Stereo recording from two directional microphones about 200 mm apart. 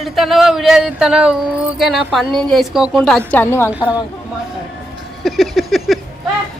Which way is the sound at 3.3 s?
10° left (ahead or behind).